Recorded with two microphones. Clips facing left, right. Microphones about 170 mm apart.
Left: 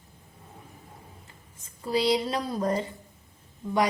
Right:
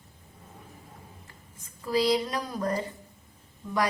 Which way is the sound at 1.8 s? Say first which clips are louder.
Even; 30° left (ahead or behind).